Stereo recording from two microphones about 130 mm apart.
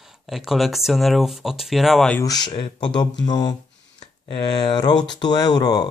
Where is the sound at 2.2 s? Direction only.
30° left (ahead or behind).